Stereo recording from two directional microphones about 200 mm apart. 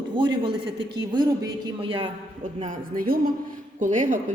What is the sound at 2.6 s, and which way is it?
Speech, 40° right (ahead or behind).